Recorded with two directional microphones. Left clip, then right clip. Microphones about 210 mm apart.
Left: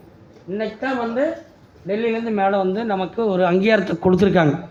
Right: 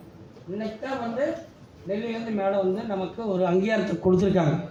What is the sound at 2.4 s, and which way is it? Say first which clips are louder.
Speech: left 4 dB; 25° left (ahead or behind).